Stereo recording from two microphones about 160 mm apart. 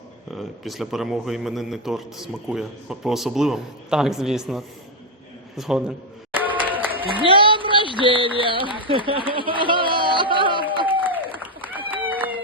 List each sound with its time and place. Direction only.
0.3 s a man's voice: centre (ahead or behind)
6.3 s a sound: 10° right (ahead or behind)
7.0 s speech: 30° right (ahead or behind)
7.5 s a sound: 30° right (ahead or behind)
7.9 s speech: 30° right (ahead or behind)
11.6 s run: 10° right (ahead or behind)